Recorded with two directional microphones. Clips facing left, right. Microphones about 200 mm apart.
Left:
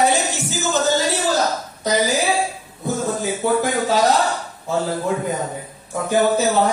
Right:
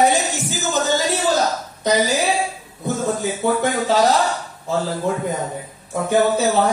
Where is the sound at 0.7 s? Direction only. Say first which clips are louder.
Left 1 dB; 15° right (ahead or behind).